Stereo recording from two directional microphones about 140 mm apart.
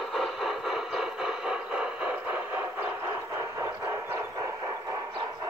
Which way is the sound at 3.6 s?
20° right (ahead or behind).